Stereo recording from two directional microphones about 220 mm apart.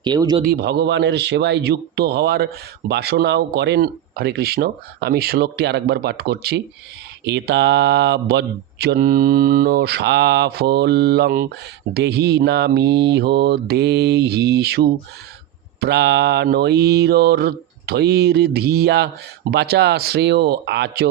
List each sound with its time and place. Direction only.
0.0 s speech: 20° right (ahead or behind)
0.4 s mantra: 45° right (ahead or behind)